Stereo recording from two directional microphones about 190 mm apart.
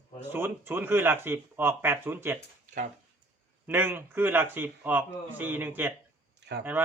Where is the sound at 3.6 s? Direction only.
10° right (ahead or behind).